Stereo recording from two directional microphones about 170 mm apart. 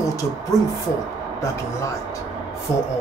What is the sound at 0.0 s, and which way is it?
Speech, 20° left (ahead or behind).